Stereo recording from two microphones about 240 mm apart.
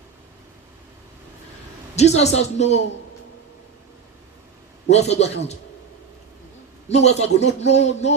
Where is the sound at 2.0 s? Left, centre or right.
Left.